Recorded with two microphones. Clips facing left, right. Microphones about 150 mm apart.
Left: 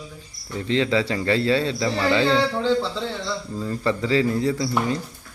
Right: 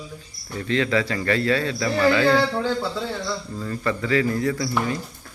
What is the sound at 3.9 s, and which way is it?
Speech, 25° left (ahead or behind).